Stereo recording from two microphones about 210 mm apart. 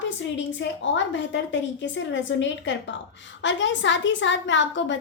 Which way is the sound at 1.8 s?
60° left (ahead or behind).